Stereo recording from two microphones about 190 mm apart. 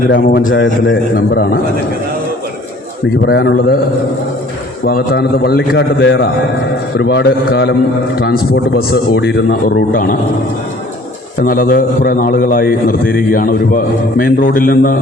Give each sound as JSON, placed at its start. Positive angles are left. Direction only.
{"t": 0.1, "sound": "a man's voice", "side_deg": 55}
{"t": 0.5, "sound": "a man's voice", "side_deg": 75}
{"t": 1.1, "sound": "a man's voice", "side_deg": 55}
{"t": 3.2, "sound": "a man's voice", "side_deg": 60}
{"t": 4.9, "sound": "a man's voice", "side_deg": 55}
{"t": 11.4, "sound": "a man's voice", "side_deg": 45}